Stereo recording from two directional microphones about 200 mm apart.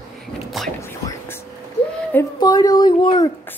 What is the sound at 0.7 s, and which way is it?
Whispering, 15° left (ahead or behind).